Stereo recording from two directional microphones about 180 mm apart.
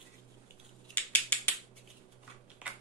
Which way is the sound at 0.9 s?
10° left (ahead or behind).